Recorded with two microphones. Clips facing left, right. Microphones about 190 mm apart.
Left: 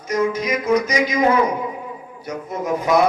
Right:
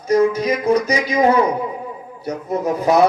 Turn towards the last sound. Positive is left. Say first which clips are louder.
# right 2 dB
turn(degrees=-35)  # may be behind; listen again after turning